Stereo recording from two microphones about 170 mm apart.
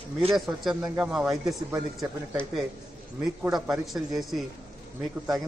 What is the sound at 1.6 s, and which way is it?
Speech, 15° right (ahead or behind).